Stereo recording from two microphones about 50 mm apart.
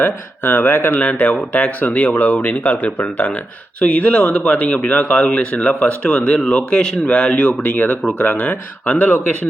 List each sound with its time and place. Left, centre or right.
0.0 s speech: left
0.9 s speech: left
7.6 s speech: left